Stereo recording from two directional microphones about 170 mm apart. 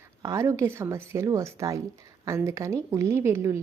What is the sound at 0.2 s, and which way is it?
A woman's voice, 20° right (ahead or behind).